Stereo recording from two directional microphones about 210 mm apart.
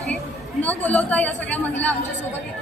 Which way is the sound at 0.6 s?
5° left (ahead or behind).